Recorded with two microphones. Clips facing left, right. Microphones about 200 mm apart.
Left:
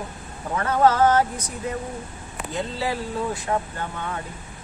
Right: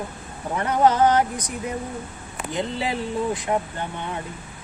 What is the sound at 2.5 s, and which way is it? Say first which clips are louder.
Speech: right 1 dB; 20° right (ahead or behind).